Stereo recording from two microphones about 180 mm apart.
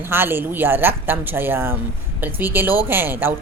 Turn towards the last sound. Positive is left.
turn(degrees=-10)  # may be behind; listen again after turning